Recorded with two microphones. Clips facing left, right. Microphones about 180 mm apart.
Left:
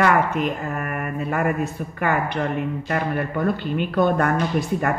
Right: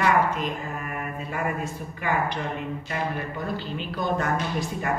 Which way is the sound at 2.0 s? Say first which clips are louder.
Left 4 dB; 60° left (ahead or behind).